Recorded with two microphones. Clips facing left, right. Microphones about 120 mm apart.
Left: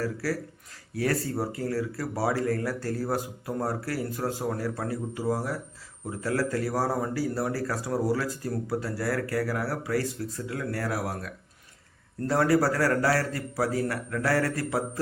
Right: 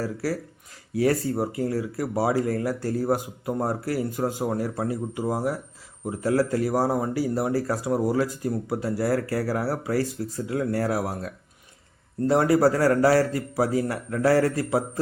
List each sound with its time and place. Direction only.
0.0 s speech: 25° right (ahead or behind)